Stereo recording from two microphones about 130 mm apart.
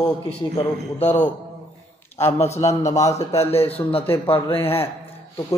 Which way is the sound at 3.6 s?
15° left (ahead or behind).